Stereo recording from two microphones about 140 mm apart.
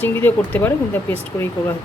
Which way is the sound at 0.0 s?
15° left (ahead or behind).